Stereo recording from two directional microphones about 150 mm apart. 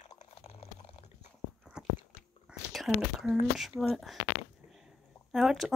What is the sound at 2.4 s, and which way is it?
Whispering, centre (ahead or behind).